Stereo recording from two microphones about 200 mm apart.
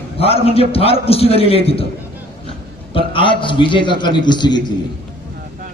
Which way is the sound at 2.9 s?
25° left (ahead or behind).